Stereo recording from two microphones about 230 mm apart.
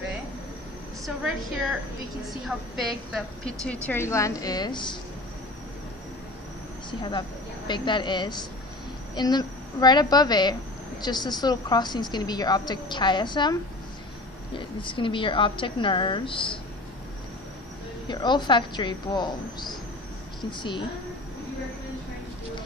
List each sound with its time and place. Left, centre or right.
2.4 s a woman's voice: centre
6.9 s a woman's voice: centre
18.0 s a woman's voice: centre